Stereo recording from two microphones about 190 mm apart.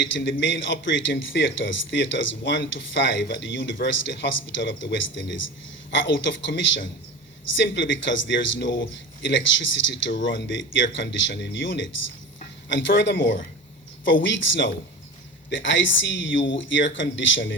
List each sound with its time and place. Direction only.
0.0 s a man's voice: 70° left (ahead or behind)
13.0 s a man's voice: 65° left (ahead or behind)
14.0 s a man's voice: 75° left (ahead or behind)